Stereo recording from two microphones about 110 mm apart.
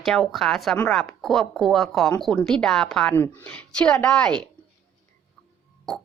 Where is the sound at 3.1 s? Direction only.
15° left (ahead or behind).